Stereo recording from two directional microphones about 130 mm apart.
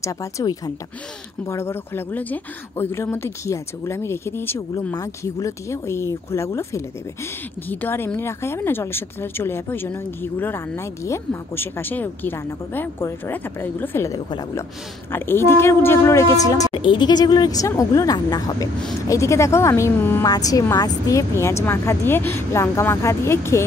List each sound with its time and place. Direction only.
0.0 s a woman's voice: 25° left (ahead or behind)
16.7 s speech: 40° left (ahead or behind); by 20.2 s 20° left (ahead or behind)
20.2 s speech: 30° left (ahead or behind)